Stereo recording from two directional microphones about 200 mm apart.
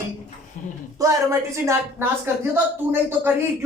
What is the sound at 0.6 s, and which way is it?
Speech, 40° left (ahead or behind).